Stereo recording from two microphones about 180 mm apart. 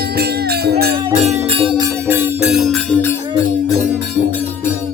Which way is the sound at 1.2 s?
35° right (ahead or behind).